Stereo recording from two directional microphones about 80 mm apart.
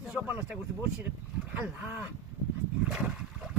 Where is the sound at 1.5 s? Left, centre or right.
Centre.